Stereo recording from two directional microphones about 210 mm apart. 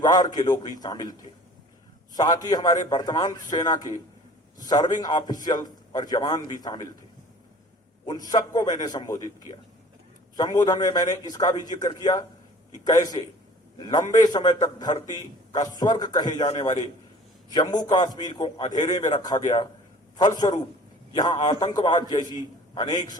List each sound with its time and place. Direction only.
0.3 s a man's voice: 20° left (ahead or behind)
2.1 s a man's voice: 20° left (ahead or behind)
8.0 s a man's voice: 20° left (ahead or behind)